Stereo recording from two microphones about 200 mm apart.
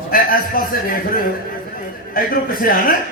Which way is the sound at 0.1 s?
45° left (ahead or behind).